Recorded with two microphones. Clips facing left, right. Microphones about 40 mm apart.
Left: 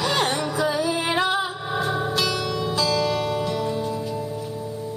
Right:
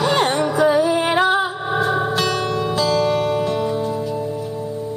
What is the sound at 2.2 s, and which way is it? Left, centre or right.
Music, right.